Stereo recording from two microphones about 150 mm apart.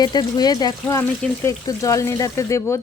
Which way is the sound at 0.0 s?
30° left (ahead or behind).